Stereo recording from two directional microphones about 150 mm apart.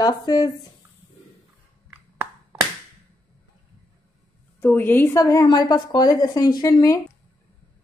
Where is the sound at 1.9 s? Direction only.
15° right (ahead or behind).